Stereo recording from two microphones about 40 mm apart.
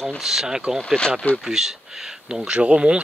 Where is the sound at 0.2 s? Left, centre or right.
Centre.